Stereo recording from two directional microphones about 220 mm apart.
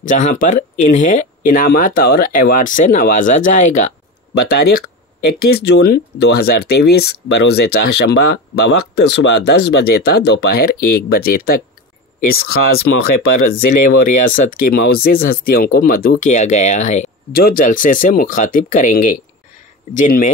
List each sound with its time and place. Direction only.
0.1 s speech: 35° left (ahead or behind)
4.3 s speech: 45° left (ahead or behind)